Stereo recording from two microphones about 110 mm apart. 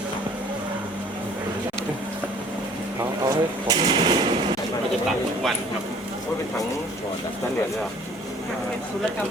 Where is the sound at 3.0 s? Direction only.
35° right (ahead or behind).